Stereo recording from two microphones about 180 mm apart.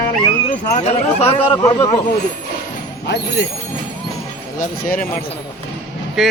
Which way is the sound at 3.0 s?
70° left (ahead or behind).